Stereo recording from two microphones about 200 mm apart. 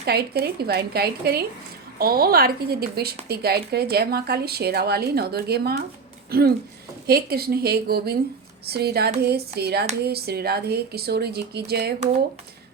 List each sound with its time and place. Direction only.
0.0 s speech: 55° right (ahead or behind)
7.1 s speech: 50° right (ahead or behind)